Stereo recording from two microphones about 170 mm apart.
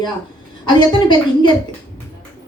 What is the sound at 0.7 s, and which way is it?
Speech, 25° left (ahead or behind).